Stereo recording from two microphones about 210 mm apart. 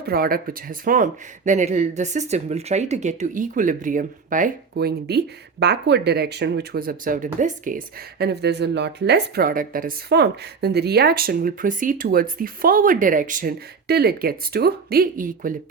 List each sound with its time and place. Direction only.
0.0 s speech: 45° right (ahead or behind)